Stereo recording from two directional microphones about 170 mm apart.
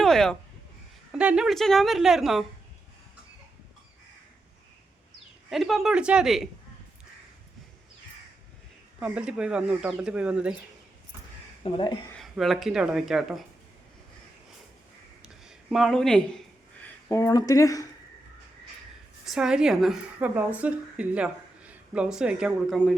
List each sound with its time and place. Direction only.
0.0 s a sound: centre (ahead or behind)
1.2 s speech: 5° right (ahead or behind)
5.5 s speech: centre (ahead or behind)
9.0 s speech: 5° right (ahead or behind)
11.6 s speech: 30° left (ahead or behind)
12.1 s speech: centre (ahead or behind)
15.2 s a sound: 5° right (ahead or behind)
16.8 s speech: 15° left (ahead or behind)
19.2 s a woman's voice: 5° right (ahead or behind)